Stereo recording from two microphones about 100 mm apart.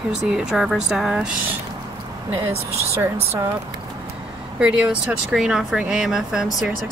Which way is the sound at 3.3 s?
30° right (ahead or behind).